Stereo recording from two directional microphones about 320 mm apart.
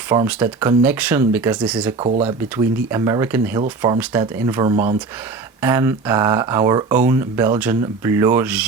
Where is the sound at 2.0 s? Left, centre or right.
Centre.